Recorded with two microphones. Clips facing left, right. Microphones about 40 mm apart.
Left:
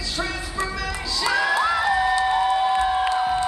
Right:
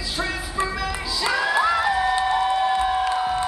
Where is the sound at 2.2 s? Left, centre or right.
Centre.